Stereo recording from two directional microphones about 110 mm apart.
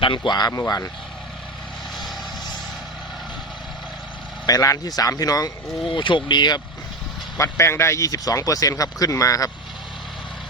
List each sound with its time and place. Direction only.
0.0 s speech: 45° left (ahead or behind)
4.4 s speech: 30° left (ahead or behind)
5.9 s speech: 50° left (ahead or behind)
7.3 s speech: 25° left (ahead or behind)